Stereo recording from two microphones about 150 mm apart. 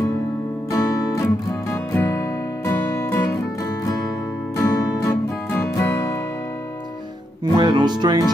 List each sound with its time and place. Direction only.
0.7 s music: 20° left (ahead or behind)
4.6 s music: 20° left (ahead or behind)
7.5 s music: 30° right (ahead or behind)